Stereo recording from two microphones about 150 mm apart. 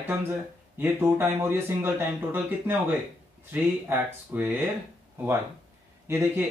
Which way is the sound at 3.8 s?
10° right (ahead or behind).